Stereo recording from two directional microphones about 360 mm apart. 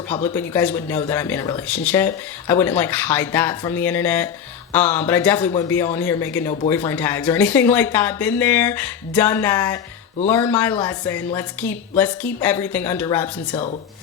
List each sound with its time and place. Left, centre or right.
0.3 s speech: centre
13.2 s speech: centre